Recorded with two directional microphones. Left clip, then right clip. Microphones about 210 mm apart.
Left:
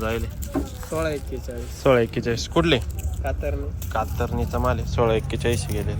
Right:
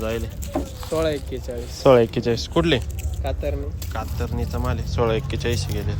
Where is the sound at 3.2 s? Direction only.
45° right (ahead or behind).